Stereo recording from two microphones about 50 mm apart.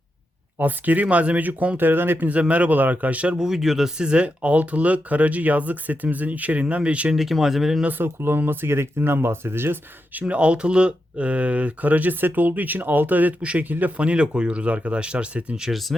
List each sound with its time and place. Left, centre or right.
0.6 s speech: right
2.3 s speech: right
3.3 s speech: centre; by 7.1 s right
7.2 s speech: centre
7.9 s speech: right
10.2 s speech: right
15.9 s speech: centre